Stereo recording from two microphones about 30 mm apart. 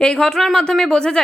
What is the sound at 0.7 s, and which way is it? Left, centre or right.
Speech, left.